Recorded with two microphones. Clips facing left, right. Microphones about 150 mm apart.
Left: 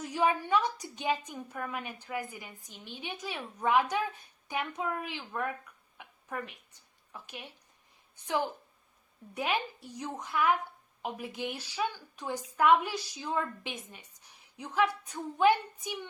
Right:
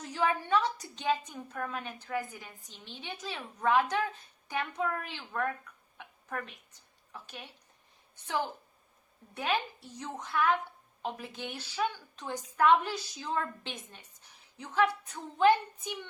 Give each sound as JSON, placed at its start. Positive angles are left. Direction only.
{"t": 0.0, "sound": "a woman's voice", "side_deg": 15}
{"t": 6.0, "sound": "a sound", "side_deg": 15}
{"t": 7.1, "sound": "a woman's voice", "side_deg": 15}
{"t": 9.3, "sound": "a woman's voice", "side_deg": 15}